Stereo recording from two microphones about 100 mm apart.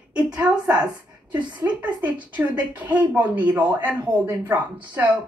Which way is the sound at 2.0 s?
15° right (ahead or behind).